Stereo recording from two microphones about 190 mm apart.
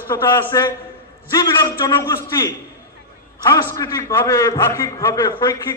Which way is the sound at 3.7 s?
20° left (ahead or behind).